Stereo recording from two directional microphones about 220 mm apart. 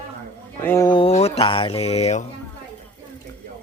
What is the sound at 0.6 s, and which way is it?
Speech, 15° left (ahead or behind).